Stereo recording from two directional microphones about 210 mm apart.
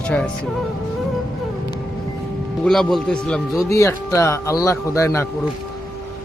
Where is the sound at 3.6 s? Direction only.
15° left (ahead or behind).